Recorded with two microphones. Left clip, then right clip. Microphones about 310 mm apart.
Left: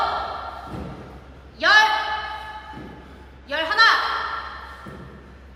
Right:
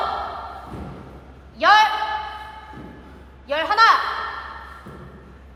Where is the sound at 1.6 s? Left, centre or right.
Centre.